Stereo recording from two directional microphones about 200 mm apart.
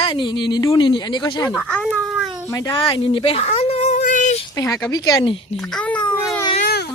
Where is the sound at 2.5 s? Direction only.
20° left (ahead or behind); by 4.4 s 40° left (ahead or behind).